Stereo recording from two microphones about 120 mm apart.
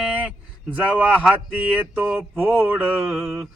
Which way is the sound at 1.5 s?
15° right (ahead or behind).